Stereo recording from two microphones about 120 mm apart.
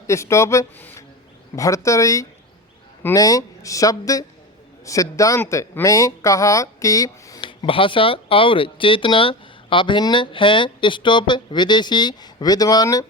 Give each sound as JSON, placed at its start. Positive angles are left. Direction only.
{"t": 0.1, "sound": "speech", "side_deg": 25}
{"t": 7.4, "sound": "speech", "side_deg": 45}